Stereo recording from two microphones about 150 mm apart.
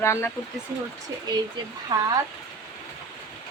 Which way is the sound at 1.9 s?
30° right (ahead or behind).